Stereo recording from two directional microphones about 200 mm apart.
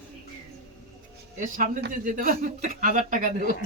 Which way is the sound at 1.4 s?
40° right (ahead or behind).